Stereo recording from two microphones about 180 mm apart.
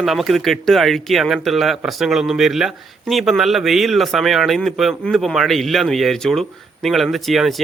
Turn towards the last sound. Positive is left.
turn(degrees=0)  # may be behind; listen again after turning